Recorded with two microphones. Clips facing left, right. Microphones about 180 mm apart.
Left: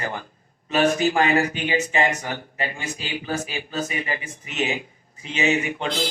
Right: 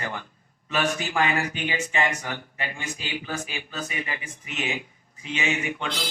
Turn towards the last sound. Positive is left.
turn(degrees=40)  # may be behind; listen again after turning